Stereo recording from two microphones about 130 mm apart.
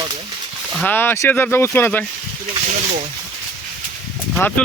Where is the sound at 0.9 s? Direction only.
15° left (ahead or behind).